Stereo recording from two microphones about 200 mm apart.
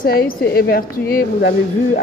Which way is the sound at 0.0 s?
50° left (ahead or behind).